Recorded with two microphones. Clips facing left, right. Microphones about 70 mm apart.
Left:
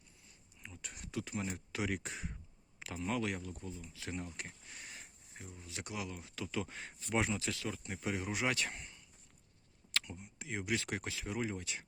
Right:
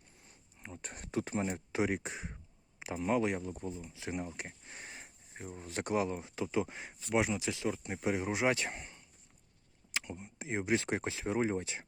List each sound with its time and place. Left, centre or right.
0.6 s speech: right